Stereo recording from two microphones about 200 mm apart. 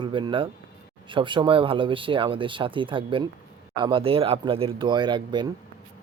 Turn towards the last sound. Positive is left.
turn(degrees=-20)  # may be behind; listen again after turning